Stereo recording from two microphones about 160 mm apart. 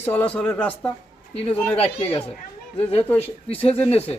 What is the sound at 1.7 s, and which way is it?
Speech, 40° left (ahead or behind).